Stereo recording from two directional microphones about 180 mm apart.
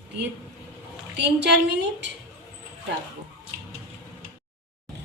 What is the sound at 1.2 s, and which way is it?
Speech, 75° right (ahead or behind).